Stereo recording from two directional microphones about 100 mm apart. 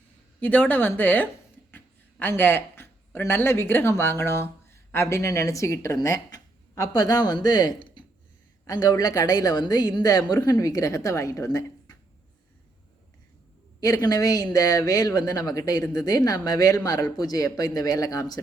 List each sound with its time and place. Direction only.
0.3 s speech: 15° left (ahead or behind); by 11.4 s 30° left (ahead or behind)
13.8 s speech: 35° left (ahead or behind)